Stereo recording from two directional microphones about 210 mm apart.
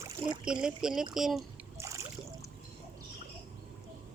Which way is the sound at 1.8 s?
15° right (ahead or behind).